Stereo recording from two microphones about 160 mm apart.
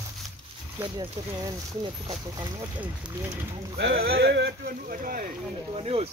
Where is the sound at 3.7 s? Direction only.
90° right; by 5.3 s 60° right (ahead or behind).